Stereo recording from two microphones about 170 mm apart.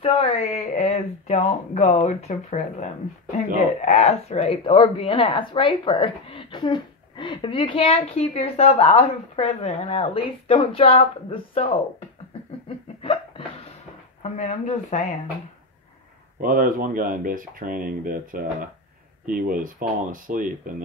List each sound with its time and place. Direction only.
0.0 s speech: 35° left (ahead or behind)
12.6 s laughter: 30° left (ahead or behind)
14.2 s speech: 45° left (ahead or behind)
16.3 s speech: 55° right (ahead or behind)